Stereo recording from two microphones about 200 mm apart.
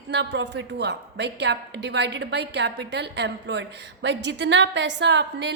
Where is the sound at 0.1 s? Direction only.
60° right (ahead or behind).